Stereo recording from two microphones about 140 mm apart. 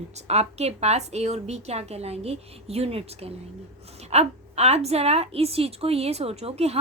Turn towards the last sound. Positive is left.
turn(degrees=-45)  # may be behind; listen again after turning